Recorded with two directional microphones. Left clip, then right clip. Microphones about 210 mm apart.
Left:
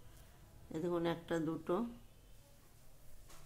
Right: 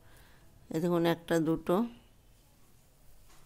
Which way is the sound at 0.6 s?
50° right (ahead or behind).